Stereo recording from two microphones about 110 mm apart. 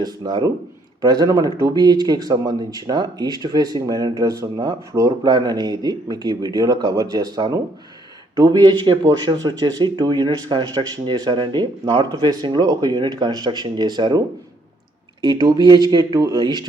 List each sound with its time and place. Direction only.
0.0 s speech: 40° right (ahead or behind)
16.1 s speech: 30° right (ahead or behind)
16.4 s speech: 40° right (ahead or behind)